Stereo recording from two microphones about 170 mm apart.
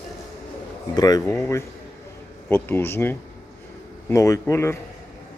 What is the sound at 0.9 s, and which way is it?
Speech, 20° left (ahead or behind).